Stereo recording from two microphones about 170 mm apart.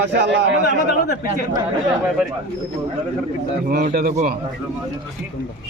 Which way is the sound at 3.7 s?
65° right (ahead or behind).